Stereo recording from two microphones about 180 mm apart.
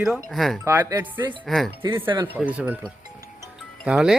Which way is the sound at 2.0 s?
25° right (ahead or behind).